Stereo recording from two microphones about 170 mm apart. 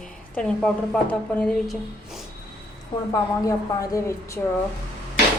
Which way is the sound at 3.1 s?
20° left (ahead or behind).